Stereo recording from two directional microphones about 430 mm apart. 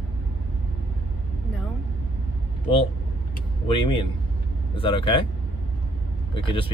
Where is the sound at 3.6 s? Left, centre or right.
Centre.